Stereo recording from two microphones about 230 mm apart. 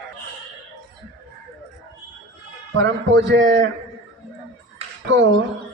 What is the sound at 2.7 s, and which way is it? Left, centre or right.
Speech, right.